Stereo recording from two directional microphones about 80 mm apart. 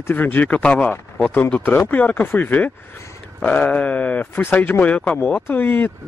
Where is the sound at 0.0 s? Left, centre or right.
Left.